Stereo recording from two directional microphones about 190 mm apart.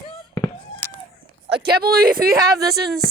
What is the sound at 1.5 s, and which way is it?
Speech, 60° right (ahead or behind).